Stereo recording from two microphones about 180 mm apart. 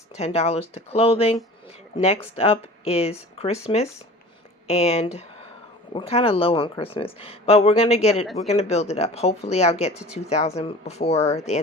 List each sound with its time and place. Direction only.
0.2 s speech: 35° left (ahead or behind)